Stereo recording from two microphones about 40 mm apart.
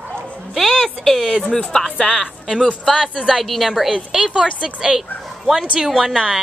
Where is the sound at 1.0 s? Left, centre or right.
Centre.